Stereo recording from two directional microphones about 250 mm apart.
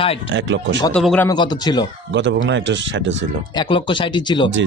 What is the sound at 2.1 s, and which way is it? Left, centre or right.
Speech, right.